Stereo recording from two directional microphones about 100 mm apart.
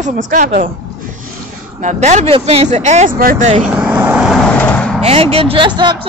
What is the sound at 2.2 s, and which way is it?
Speech, 75° right (ahead or behind).